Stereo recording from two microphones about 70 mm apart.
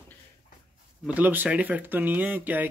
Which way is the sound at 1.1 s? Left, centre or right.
Right.